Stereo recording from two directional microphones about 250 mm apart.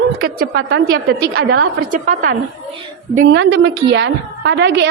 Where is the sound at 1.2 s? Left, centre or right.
Right.